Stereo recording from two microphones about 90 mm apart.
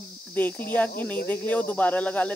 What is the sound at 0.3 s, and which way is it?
Speech, 20° left (ahead or behind).